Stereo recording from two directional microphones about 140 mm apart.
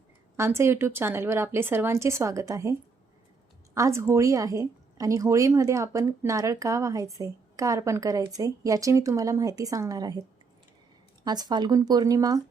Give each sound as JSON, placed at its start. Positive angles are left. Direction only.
{"t": 0.3, "sound": "a woman's voice", "side_deg": -20}
{"t": 3.8, "sound": "a woman's voice", "side_deg": -20}